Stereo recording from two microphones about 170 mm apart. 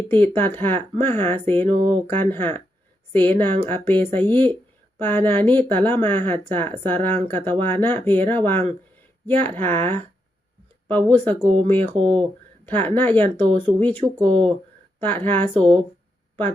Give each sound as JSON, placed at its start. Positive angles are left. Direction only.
{"t": 0.1, "sound": "speech", "side_deg": 10}
{"t": 1.6, "sound": "speech", "side_deg": -30}
{"t": 2.0, "sound": "speech", "side_deg": 10}
{"t": 14.2, "sound": "speech", "side_deg": -30}
{"t": 15.0, "sound": "speech", "side_deg": 10}